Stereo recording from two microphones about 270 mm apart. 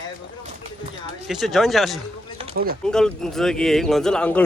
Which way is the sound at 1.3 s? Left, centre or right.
Centre.